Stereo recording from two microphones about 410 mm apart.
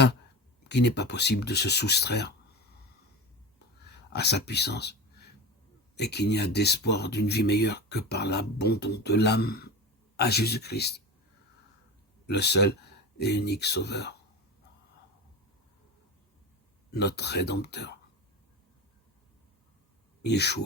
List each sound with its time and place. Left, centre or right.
0.7 s speech: left
3.8 s speech: left
6.0 s speech: left
12.2 s speech: left
16.9 s speech: left
20.2 s speech: left